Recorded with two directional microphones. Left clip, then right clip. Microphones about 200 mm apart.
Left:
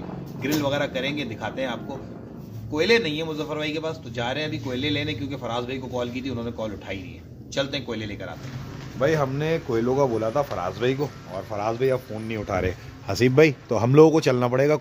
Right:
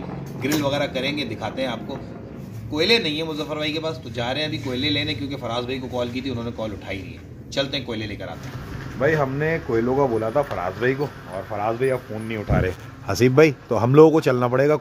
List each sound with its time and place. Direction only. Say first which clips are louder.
0.4 s a man's voice: right 2 dB; centre (ahead or behind)
2.8 s a man's voice: right 1 dB; centre (ahead or behind)
9.0 s speech: right 2 dB; 10° left (ahead or behind)
13.0 s a man's voice: right 2 dB; centre (ahead or behind)